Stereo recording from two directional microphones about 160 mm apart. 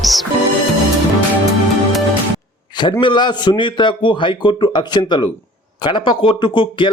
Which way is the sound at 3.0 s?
30° left (ahead or behind).